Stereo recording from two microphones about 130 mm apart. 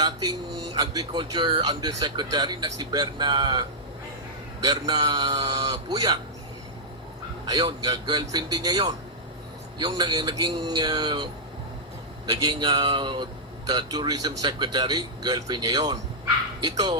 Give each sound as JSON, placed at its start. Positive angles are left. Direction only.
{"t": 0.0, "sound": "speech", "side_deg": -30}
{"t": 7.4, "sound": "speech", "side_deg": -30}
{"t": 9.8, "sound": "speech", "side_deg": -35}